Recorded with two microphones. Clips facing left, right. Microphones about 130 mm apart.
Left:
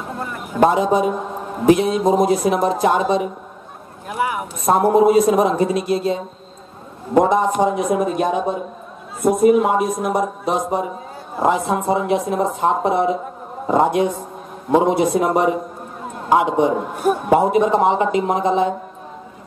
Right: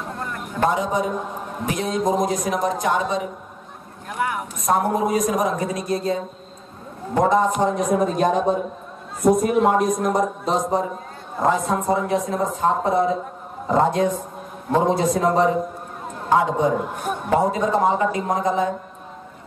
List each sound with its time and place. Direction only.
0.2 s a sound: 5° left (ahead or behind)
0.7 s speech: 25° left (ahead or behind)
1.8 s a man's voice: 10° left (ahead or behind)
2.6 s speech: 30° left (ahead or behind)
4.1 s speech: 5° left (ahead or behind)
4.6 s speech: 25° left (ahead or behind)
7.5 s a man's voice: 5° left (ahead or behind); by 18.7 s 25° left (ahead or behind)